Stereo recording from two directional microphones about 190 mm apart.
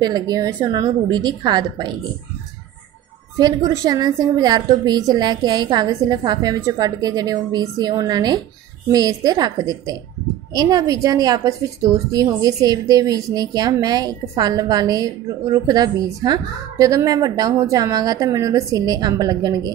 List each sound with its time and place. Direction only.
0.0 s a woman's voice: 20° right (ahead or behind)
3.3 s a woman's voice: 20° right (ahead or behind)